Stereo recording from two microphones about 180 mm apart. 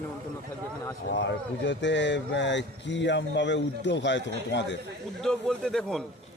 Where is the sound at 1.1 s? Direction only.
80° left.